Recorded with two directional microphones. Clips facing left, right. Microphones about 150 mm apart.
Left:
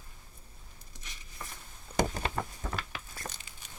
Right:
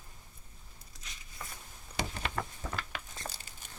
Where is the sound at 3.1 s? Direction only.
25° right (ahead or behind).